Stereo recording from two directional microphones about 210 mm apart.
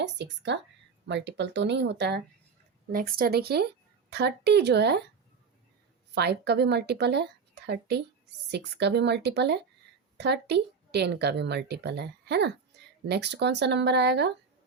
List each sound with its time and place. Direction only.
0.0 s speech: 55° right (ahead or behind)
6.1 s speech: 50° right (ahead or behind)